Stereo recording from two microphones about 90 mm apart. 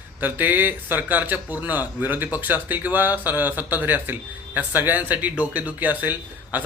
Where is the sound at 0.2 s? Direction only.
20° right (ahead or behind).